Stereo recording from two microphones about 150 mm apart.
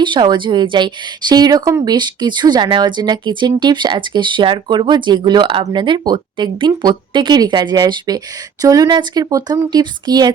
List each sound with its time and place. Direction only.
0.0 s a woman's voice: 30° right (ahead or behind)